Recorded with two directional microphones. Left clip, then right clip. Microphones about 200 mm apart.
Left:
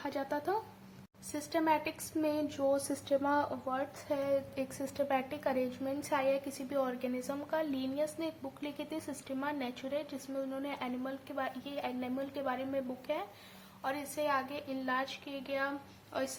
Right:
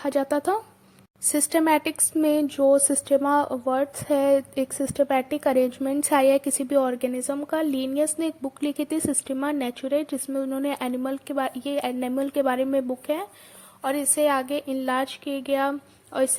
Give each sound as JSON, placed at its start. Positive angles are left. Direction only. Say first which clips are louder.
{"t": 0.0, "sound": "speech", "louder": "right 13 dB", "side_deg": -45}